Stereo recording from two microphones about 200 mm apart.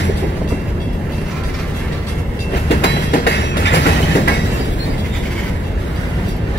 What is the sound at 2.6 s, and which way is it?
Train, 60° left (ahead or behind).